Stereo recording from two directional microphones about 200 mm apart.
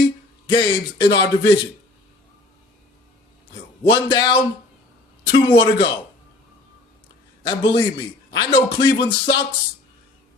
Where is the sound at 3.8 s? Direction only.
20° left (ahead or behind).